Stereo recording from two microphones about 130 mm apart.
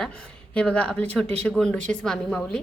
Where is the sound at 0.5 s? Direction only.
10° left (ahead or behind).